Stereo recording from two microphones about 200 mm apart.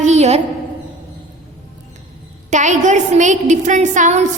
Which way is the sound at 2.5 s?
35° right (ahead or behind).